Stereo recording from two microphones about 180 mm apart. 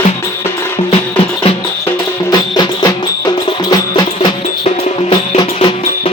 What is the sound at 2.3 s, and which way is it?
Music, 20° left (ahead or behind).